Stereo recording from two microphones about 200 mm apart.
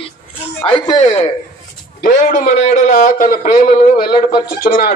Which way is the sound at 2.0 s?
45° left (ahead or behind).